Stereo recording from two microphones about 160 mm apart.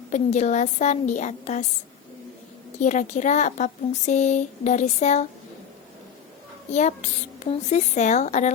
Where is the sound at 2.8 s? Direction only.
50° left (ahead or behind).